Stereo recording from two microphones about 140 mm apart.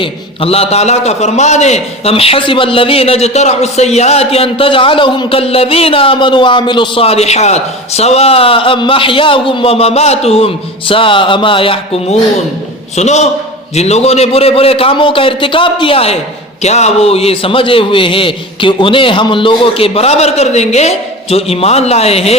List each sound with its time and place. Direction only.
0.0 s a man's voice: 45° left (ahead or behind)
13.0 s a man's voice: 55° left (ahead or behind)